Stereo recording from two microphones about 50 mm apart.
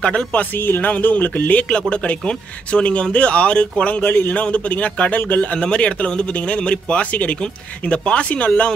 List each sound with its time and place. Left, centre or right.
0.0 s speech: left
0.6 s speech: left
0.8 s speech: left
1.7 s speech: centre